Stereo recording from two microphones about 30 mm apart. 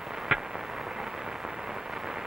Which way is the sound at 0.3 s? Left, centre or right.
Centre.